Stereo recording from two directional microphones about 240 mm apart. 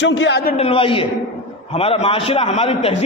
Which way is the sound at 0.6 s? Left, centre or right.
Left.